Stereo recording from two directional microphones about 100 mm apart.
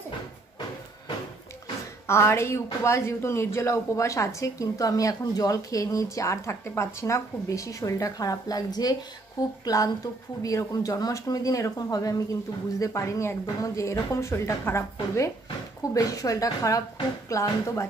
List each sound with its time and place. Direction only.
2.0 s speech: 25° left (ahead or behind)